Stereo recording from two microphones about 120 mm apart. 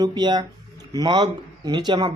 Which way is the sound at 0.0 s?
35° right (ahead or behind).